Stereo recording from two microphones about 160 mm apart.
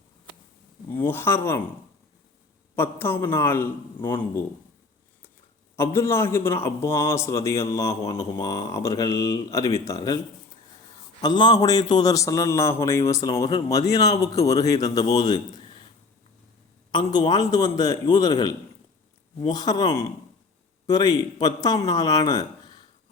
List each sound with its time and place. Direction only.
0.9 s a man's voice: 15° left (ahead or behind)
2.7 s a man's voice: 15° left (ahead or behind)
5.7 s a man's voice: 15° left (ahead or behind)
11.2 s a man's voice: 25° left (ahead or behind)
16.9 s a man's voice: 25° left (ahead or behind)